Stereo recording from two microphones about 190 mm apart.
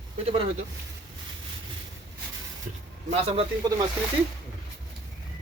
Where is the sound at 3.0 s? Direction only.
30° right (ahead or behind).